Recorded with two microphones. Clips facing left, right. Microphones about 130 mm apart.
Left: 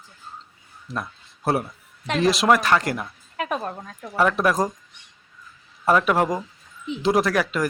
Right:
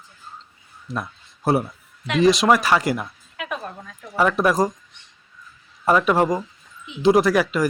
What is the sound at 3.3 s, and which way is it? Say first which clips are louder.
Speech: left 4 dB; 40° left (ahead or behind).